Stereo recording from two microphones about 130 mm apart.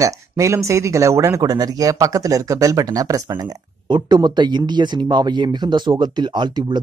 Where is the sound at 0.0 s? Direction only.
25° right (ahead or behind).